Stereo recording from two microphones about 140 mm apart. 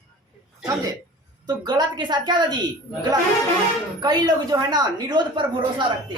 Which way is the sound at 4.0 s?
30° right (ahead or behind).